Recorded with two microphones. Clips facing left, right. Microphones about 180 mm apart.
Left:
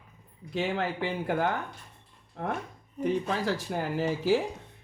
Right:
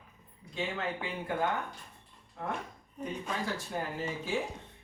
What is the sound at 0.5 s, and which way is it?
Speech, 80° left.